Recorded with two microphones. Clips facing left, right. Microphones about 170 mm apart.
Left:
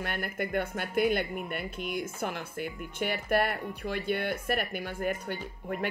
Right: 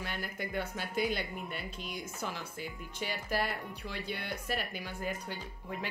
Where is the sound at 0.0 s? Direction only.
55° left (ahead or behind).